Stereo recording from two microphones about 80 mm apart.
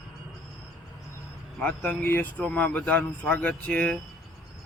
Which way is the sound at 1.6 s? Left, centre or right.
Centre.